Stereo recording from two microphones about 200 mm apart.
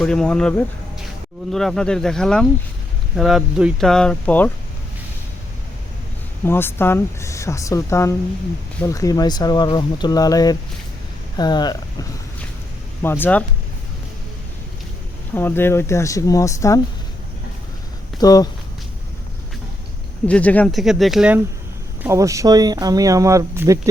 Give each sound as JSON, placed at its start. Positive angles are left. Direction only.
{"t": 0.0, "sound": "speech", "side_deg": 5}
{"t": 6.4, "sound": "speech", "side_deg": 10}
{"t": 15.4, "sound": "speech", "side_deg": 10}
{"t": 18.2, "sound": "speech", "side_deg": 20}
{"t": 20.2, "sound": "speech", "side_deg": 5}